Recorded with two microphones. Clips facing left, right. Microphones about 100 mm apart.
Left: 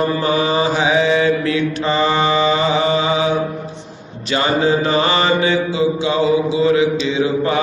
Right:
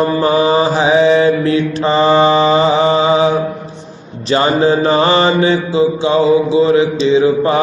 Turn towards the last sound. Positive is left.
turn(degrees=-30)  # may be behind; listen again after turning